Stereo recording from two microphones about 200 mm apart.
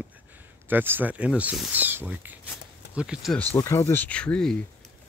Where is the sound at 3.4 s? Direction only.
10° left (ahead or behind).